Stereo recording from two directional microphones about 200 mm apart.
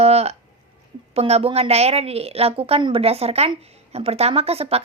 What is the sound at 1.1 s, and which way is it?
A woman's voice, 30° right (ahead or behind).